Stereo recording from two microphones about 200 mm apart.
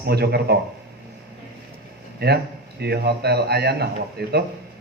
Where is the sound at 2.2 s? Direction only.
55° right (ahead or behind).